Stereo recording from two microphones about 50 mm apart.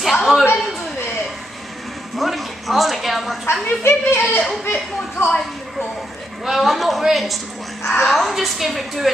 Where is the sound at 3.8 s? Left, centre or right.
Left.